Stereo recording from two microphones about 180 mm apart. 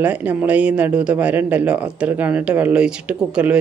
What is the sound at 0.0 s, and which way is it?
A man's voice, 10° right (ahead or behind).